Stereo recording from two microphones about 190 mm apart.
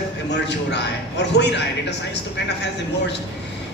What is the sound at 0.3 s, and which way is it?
A man's voice, 65° left (ahead or behind).